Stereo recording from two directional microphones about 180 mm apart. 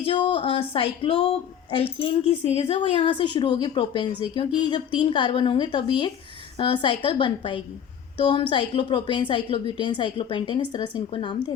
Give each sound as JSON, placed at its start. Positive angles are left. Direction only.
{"t": 0.0, "sound": "a woman's voice", "side_deg": 30}